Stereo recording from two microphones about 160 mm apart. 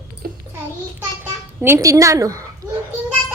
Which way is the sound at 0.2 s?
70° right (ahead or behind).